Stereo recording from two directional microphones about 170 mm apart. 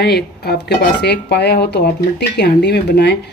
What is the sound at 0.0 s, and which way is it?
Speech, 70° left (ahead or behind).